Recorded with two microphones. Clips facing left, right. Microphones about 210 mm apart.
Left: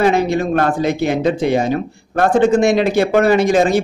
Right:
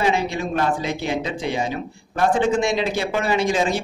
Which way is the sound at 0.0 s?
55° left (ahead or behind).